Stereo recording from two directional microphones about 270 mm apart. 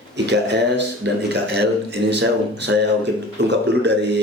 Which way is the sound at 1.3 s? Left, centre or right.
Right.